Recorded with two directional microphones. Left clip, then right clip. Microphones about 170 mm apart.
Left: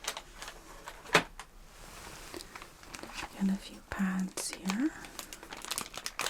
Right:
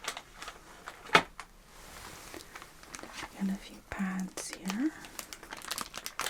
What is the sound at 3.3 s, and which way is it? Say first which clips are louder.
Whispering: left 2 dB; 20° left (ahead or behind).